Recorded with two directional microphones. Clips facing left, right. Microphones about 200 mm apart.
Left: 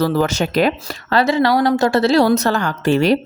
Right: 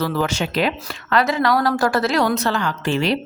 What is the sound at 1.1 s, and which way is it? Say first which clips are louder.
Speech: left 3 dB; 30° left (ahead or behind).